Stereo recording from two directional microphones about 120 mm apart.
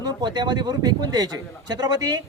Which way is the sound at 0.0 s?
35° right (ahead or behind).